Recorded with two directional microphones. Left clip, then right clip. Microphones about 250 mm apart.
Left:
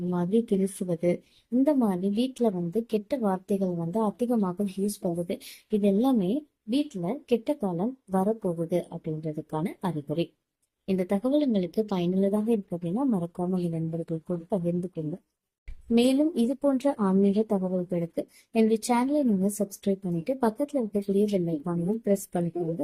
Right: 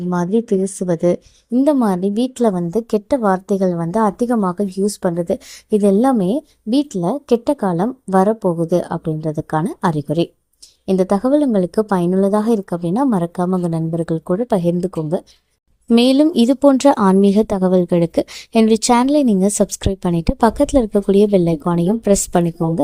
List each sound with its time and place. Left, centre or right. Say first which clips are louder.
0.1 s a woman's voice: right 9 dB; right
5.8 s a woman's voice: right 10 dB; right
15.9 s a woman's voice: right 11 dB; right